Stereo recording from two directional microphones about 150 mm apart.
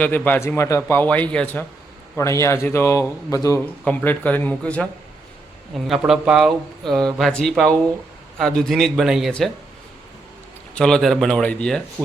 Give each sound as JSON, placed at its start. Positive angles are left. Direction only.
{"t": 0.0, "sound": "a man's voice", "side_deg": 10}
{"t": 2.1, "sound": "a man's voice", "side_deg": 20}
{"t": 10.8, "sound": "speech", "side_deg": 5}
{"t": 12.0, "sound": "speech", "side_deg": -10}